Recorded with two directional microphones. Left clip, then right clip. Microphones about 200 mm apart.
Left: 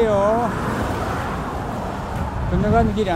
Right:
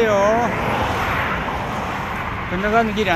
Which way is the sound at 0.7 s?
60° left (ahead or behind).